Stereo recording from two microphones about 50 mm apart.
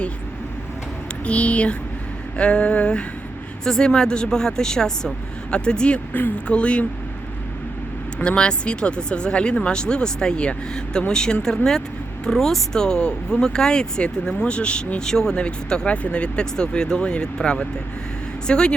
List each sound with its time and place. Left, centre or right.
1.2 s speech: left
3.6 s speech: centre
8.2 s speech: left